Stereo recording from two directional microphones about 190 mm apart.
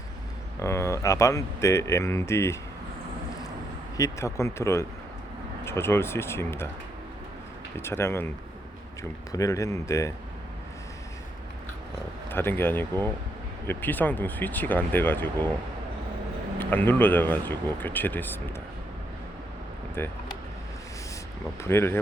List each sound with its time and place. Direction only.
0.6 s speech: 15° left (ahead or behind)
3.9 s speech: 15° left (ahead or behind)
7.8 s speech: 15° left (ahead or behind)
9.3 s speech: 15° left (ahead or behind)
12.3 s speech: 10° left (ahead or behind)
16.6 s speech: 10° left (ahead or behind)
20.0 s speech: 10° left (ahead or behind)
21.6 s speech: 15° left (ahead or behind)